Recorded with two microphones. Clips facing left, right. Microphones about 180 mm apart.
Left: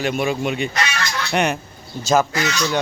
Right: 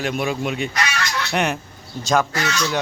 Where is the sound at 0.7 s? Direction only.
25° left (ahead or behind).